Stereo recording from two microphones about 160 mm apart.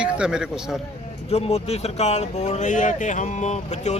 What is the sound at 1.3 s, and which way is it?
Speech, 40° left (ahead or behind).